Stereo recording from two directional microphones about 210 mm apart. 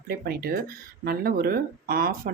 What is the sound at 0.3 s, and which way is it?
Speech, 45° right (ahead or behind).